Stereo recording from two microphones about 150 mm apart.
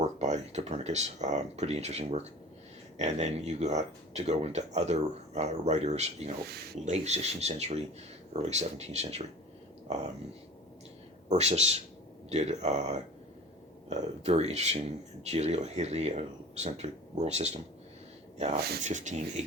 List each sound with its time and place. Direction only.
0.2 s speech: 50° right (ahead or behind)
6.4 s speech: 90° right
6.8 s speech: 45° right (ahead or behind)
11.3 s speech: 50° right (ahead or behind)
18.8 s speech: 55° right (ahead or behind)